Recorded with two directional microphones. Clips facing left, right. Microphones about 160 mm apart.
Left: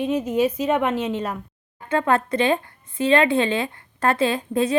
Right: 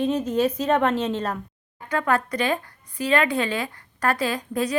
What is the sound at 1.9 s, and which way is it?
Speech, 25° left (ahead or behind).